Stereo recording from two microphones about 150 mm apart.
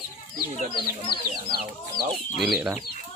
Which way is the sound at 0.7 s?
35° left (ahead or behind).